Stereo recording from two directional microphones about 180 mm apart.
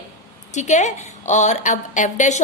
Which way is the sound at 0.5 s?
40° left (ahead or behind).